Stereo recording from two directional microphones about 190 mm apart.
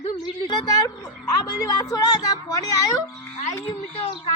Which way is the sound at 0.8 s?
20° left (ahead or behind).